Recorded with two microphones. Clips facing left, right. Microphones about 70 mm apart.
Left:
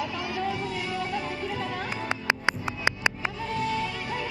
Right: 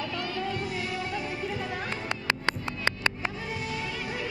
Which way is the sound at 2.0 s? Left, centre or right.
Centre.